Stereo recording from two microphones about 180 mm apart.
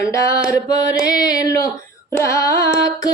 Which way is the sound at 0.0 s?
15° left (ahead or behind).